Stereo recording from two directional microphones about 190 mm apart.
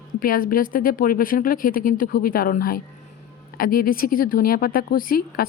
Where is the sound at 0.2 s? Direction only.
50° left (ahead or behind).